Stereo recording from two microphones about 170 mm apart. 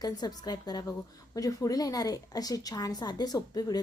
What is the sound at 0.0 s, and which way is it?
A woman's voice, 25° left (ahead or behind).